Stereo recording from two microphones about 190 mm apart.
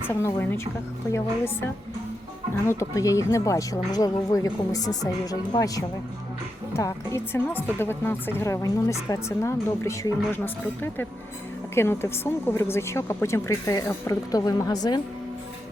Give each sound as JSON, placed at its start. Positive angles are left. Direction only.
{"t": 0.1, "sound": "speech", "side_deg": 15}
{"t": 2.6, "sound": "speech", "side_deg": 15}